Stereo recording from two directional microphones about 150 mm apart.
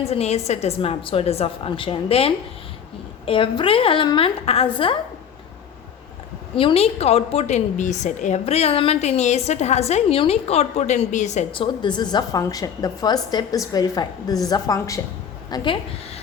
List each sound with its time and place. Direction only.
0.0 s a woman's voice: 45° left (ahead or behind)
6.6 s a woman's voice: 40° left (ahead or behind)
11.5 s a woman's voice: 35° left (ahead or behind)